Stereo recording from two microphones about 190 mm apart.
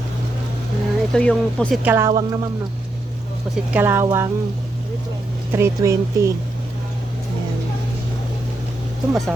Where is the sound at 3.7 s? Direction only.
10° right (ahead or behind).